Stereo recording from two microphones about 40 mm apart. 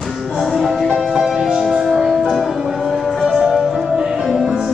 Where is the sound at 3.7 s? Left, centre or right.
Centre.